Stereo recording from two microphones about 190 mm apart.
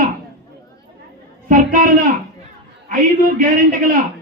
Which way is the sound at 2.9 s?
45° right (ahead or behind).